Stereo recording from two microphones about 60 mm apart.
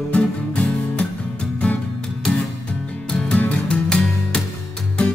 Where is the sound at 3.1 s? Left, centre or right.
Centre.